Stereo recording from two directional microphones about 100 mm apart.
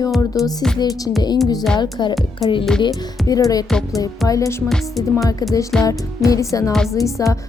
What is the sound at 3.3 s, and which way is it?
Music, 35° left (ahead or behind).